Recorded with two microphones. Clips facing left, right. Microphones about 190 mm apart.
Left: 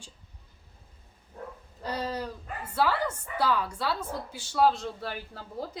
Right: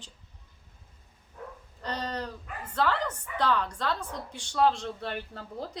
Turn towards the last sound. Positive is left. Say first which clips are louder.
# left 1 dB
turn(degrees=5)  # may be behind; listen again after turning